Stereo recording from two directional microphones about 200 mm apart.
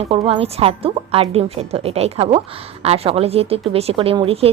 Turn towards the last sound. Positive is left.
turn(degrees=-30)  # may be behind; listen again after turning